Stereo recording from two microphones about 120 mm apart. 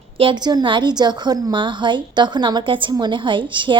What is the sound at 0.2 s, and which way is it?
A woman's voice, 40° right (ahead or behind).